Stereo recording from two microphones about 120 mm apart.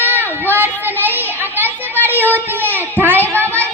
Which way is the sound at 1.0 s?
15° right (ahead or behind).